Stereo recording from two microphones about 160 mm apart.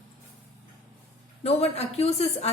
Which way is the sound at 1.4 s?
40° left (ahead or behind).